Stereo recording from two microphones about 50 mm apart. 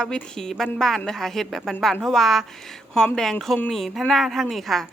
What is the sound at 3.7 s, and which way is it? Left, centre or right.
A woman's voice, centre.